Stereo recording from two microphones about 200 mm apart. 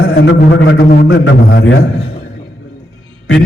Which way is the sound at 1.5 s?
55° left (ahead or behind).